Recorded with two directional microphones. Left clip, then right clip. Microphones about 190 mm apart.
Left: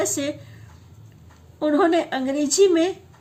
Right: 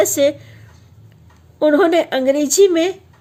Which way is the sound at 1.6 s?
45° right (ahead or behind).